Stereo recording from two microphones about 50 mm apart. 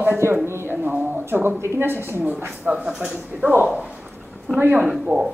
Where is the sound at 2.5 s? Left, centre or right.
Centre.